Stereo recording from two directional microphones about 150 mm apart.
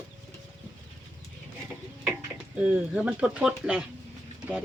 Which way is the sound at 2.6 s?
10° right (ahead or behind).